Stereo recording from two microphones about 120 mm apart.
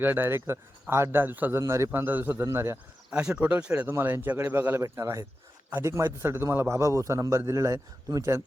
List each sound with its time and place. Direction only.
0.0 s a man's voice: 15° right (ahead or behind)
3.1 s a man's voice: 10° right (ahead or behind); by 8.4 s 25° right (ahead or behind)